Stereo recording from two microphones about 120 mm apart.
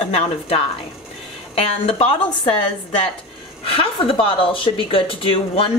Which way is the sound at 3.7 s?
50° left (ahead or behind).